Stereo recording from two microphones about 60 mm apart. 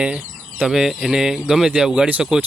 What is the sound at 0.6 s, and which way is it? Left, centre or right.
Speech, centre.